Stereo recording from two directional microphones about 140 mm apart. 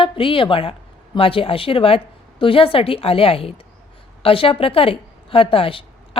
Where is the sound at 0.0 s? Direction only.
40° left (ahead or behind).